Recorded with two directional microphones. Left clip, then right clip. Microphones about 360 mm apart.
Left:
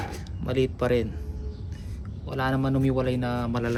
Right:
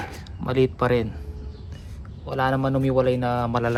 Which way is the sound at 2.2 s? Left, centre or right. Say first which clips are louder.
Right 4 dB; centre.